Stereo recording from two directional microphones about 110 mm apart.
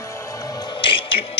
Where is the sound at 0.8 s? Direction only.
50° left (ahead or behind).